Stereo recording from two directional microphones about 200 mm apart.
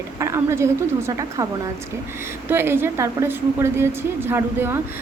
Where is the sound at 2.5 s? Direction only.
10° right (ahead or behind).